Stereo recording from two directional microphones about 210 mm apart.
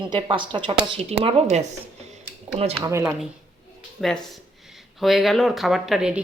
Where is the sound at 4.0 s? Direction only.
Centre (ahead or behind).